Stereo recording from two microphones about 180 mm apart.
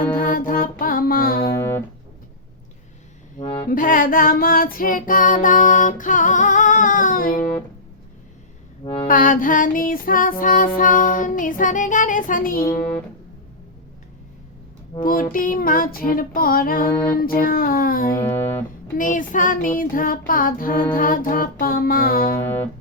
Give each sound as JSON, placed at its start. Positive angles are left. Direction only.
{"t": 0.0, "sound": "music", "side_deg": 50}
{"t": 1.5, "sound": "music", "side_deg": 15}
{"t": 3.4, "sound": "music", "side_deg": 30}
{"t": 3.7, "sound": "female singing", "side_deg": 50}
{"t": 9.0, "sound": "child singing", "side_deg": 50}
{"t": 15.0, "sound": "child singing", "side_deg": 50}
{"t": 18.2, "sound": "music", "side_deg": 15}
{"t": 18.9, "sound": "child singing", "side_deg": 45}
{"t": 22.4, "sound": "music", "side_deg": 10}